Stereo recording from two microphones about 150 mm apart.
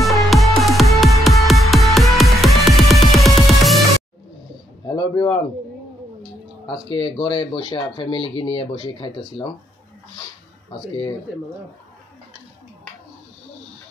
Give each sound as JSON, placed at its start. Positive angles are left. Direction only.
{"t": 0.0, "sound": "music", "side_deg": 0}
{"t": 4.8, "sound": "a sound", "side_deg": 30}
{"t": 6.6, "sound": "speech", "side_deg": 35}